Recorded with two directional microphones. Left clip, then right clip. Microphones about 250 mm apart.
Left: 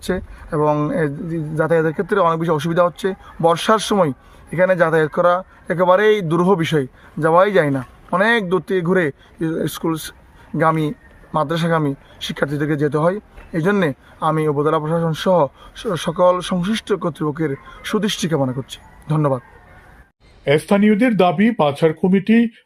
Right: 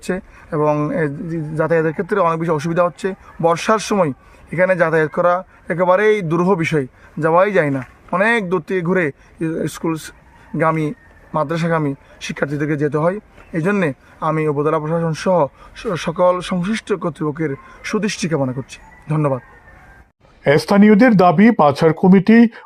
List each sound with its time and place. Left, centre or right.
0.1 s speech: centre
20.4 s speech: right